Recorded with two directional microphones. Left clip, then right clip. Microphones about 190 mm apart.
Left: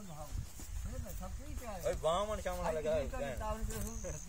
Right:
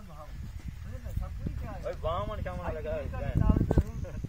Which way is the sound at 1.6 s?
20° left (ahead or behind).